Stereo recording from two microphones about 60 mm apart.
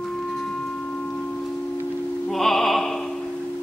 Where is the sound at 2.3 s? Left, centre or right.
Centre.